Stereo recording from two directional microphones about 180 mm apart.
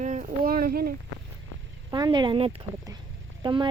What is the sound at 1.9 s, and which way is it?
Speech, 25° right (ahead or behind).